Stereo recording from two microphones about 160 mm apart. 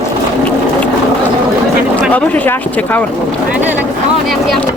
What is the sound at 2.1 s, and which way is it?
Speech, 10° left (ahead or behind).